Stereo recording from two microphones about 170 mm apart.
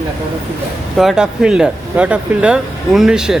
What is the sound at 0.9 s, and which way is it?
Speech, centre (ahead or behind).